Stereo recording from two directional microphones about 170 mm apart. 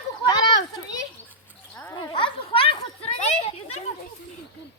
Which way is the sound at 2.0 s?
30° left (ahead or behind).